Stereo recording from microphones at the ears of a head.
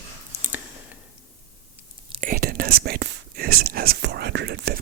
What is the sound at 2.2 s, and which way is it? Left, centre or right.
Speech, right.